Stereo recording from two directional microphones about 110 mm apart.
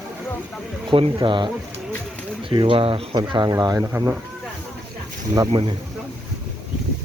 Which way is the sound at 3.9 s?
20° right (ahead or behind).